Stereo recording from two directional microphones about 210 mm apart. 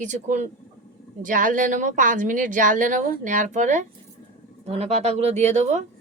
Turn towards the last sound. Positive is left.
turn(degrees=-35)  # may be behind; listen again after turning